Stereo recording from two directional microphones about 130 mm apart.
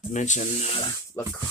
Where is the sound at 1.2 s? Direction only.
20° left (ahead or behind).